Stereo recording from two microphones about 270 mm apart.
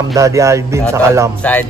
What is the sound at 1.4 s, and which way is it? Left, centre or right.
Speech, centre.